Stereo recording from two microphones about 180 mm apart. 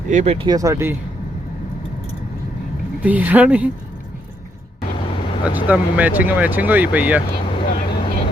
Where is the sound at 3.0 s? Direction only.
10° right (ahead or behind).